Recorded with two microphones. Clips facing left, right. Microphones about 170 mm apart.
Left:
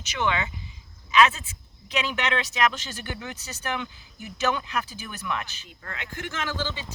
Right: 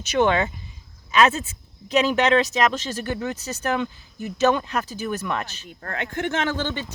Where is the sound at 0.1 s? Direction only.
50° right (ahead or behind).